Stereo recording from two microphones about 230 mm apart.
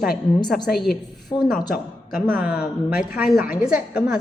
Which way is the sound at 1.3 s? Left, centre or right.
Centre.